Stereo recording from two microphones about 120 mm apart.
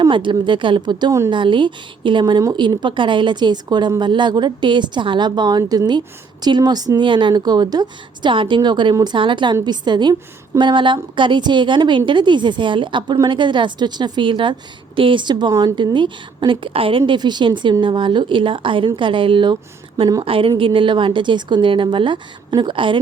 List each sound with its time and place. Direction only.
0.0 s a woman's voice: 40° right (ahead or behind)
17.1 s a woman's voice: 40° right (ahead or behind)